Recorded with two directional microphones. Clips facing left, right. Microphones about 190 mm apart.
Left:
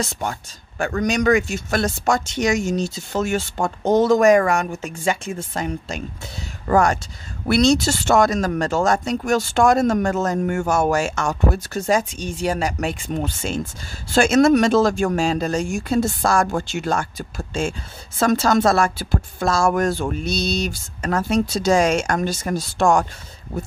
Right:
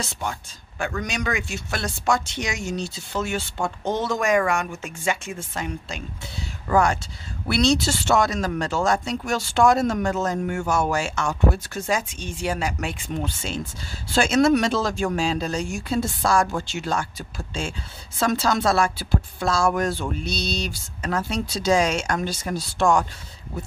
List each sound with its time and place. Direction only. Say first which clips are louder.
0.0 s speech: left 4 dB; 45° left (ahead or behind)
18.2 s speech: left 5 dB; 50° left (ahead or behind)